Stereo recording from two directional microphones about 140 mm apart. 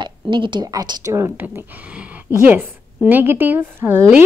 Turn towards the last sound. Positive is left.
turn(degrees=-15)  # may be behind; listen again after turning